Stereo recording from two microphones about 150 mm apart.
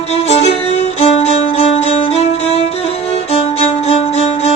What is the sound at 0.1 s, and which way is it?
Music, 45° left (ahead or behind).